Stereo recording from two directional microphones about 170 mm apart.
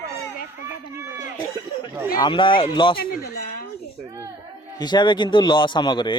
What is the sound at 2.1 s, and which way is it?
Speech, 25° left (ahead or behind).